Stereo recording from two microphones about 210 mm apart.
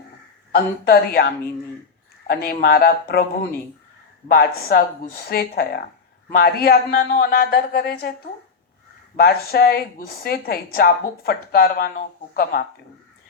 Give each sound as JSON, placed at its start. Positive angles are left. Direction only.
{"t": 0.5, "sound": "a woman's voice", "side_deg": 45}
{"t": 4.3, "sound": "a woman's voice", "side_deg": 45}
{"t": 9.1, "sound": "a woman's voice", "side_deg": 45}